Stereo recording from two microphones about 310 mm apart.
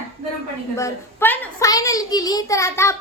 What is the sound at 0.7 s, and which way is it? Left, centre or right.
A child's voice, centre.